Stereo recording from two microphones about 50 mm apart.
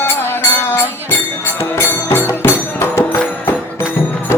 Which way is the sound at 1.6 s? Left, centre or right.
Left.